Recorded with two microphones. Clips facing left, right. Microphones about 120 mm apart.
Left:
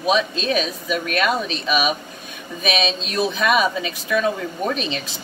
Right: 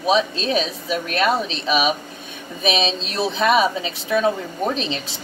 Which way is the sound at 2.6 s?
30° right (ahead or behind).